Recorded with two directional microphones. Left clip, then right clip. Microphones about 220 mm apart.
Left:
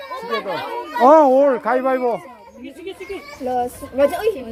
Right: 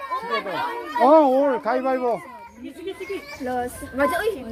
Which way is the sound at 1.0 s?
15° left (ahead or behind).